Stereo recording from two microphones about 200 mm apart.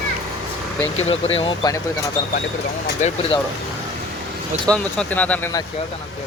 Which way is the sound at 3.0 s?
35° left (ahead or behind).